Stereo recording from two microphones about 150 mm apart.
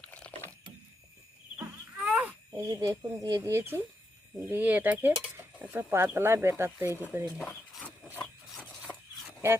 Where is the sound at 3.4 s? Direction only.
15° right (ahead or behind).